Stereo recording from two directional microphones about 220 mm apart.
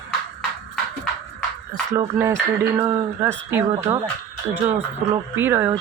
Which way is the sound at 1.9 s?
10° right (ahead or behind).